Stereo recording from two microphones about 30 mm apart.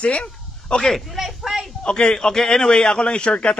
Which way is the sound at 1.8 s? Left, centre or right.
Left.